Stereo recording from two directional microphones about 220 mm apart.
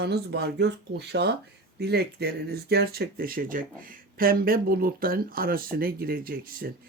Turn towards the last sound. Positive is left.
turn(degrees=-40)  # may be behind; listen again after turning